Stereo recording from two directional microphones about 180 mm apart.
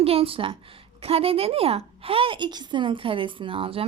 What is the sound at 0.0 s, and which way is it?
A woman's voice, 30° right (ahead or behind).